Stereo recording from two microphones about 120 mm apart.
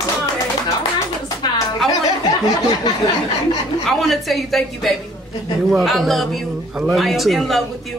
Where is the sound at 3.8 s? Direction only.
Centre (ahead or behind).